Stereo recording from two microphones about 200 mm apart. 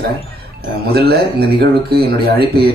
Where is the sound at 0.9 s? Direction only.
55° right (ahead or behind).